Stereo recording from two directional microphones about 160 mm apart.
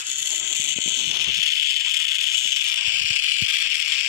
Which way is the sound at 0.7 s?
15° right (ahead or behind).